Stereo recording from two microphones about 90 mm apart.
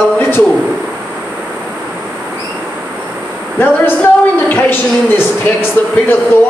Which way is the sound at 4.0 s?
20° left (ahead or behind).